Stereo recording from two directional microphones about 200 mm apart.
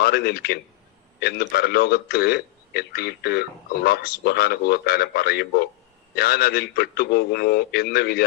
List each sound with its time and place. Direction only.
0.0 s a man's voice: 50° left (ahead or behind)